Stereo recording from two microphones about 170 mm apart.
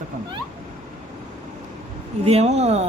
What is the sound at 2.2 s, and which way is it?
Speech, 40° right (ahead or behind).